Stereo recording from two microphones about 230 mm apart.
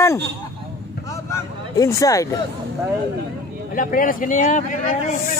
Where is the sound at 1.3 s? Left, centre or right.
Centre.